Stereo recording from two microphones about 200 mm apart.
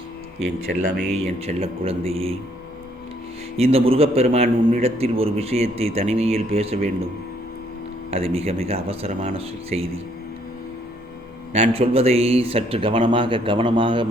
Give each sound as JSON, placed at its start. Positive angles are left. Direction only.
{"t": 1.4, "sound": "a man's voice", "side_deg": -30}
{"t": 3.6, "sound": "a man's voice", "side_deg": -30}
{"t": 8.1, "sound": "a man's voice", "side_deg": -30}
{"t": 11.5, "sound": "a man's voice", "side_deg": -30}